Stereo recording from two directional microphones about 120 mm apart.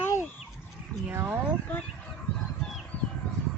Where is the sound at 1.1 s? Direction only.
20° right (ahead or behind).